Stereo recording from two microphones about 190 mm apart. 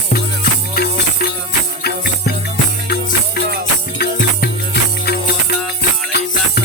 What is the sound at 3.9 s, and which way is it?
Music, 55° left (ahead or behind).